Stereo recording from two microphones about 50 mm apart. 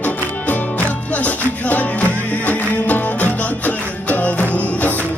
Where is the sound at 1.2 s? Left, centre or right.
Left.